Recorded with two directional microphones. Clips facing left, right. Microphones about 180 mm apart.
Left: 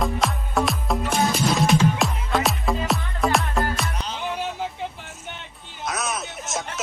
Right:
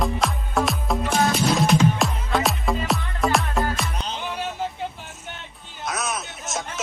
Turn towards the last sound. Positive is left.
turn(degrees=0)  # may be behind; listen again after turning